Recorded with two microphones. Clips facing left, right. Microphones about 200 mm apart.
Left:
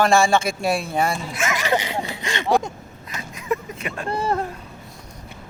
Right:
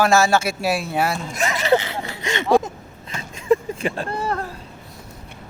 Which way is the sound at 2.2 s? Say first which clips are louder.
Right 4 dB; 20° right (ahead or behind).